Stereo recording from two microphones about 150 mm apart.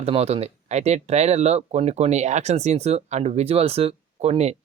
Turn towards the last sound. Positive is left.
turn(degrees=-45)  # may be behind; listen again after turning